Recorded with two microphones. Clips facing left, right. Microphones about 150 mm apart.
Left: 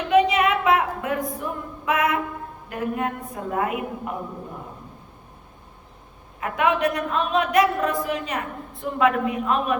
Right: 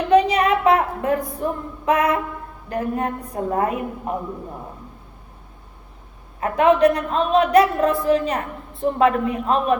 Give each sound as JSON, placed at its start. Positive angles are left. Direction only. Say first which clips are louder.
{"t": 0.1, "sound": "a sound", "louder": "right 2 dB", "side_deg": -35}
{"t": 2.6, "sound": "a woman's voice", "louder": "right 3 dB", "side_deg": -35}
{"t": 6.4, "sound": "a woman's voice", "louder": "right 6 dB", "side_deg": -35}